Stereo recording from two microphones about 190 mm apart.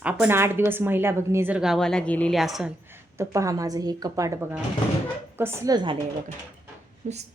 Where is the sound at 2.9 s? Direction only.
15° right (ahead or behind).